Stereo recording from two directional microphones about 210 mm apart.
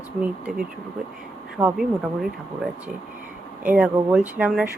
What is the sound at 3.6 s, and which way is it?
Speech, 5° right (ahead or behind).